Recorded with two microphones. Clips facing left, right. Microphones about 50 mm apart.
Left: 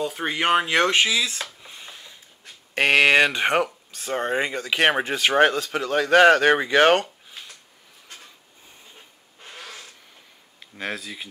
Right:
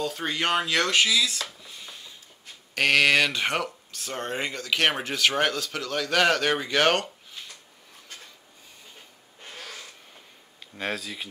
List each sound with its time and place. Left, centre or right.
0.0 s speech: centre
9.5 s cat: centre
10.8 s speech: centre